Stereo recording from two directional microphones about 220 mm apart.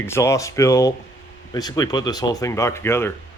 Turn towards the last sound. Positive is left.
turn(degrees=10)  # may be behind; listen again after turning